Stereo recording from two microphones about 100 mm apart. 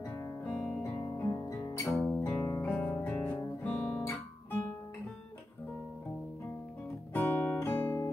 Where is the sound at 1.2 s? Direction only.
35° left (ahead or behind).